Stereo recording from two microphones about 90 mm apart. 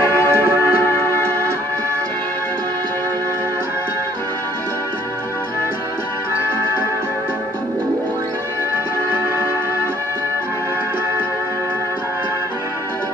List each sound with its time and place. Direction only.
0.0 s music: 25° left (ahead or behind)